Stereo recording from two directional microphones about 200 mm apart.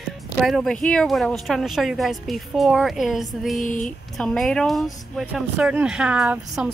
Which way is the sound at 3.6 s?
40° left (ahead or behind).